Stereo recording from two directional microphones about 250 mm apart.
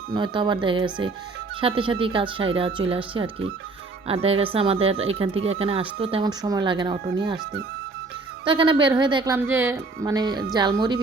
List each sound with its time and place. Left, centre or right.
0.1 s speech: centre
8.4 s speech: centre